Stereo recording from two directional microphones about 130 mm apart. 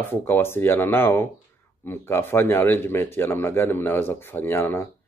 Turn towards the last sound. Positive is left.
turn(degrees=15)  # may be behind; listen again after turning